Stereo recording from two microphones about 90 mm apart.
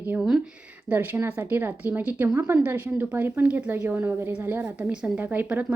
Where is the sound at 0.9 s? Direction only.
25° right (ahead or behind).